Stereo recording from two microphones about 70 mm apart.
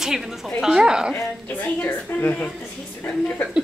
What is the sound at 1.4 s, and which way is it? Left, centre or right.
A woman's voice, left.